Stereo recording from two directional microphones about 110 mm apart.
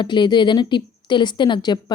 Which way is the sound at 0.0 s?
45° left (ahead or behind).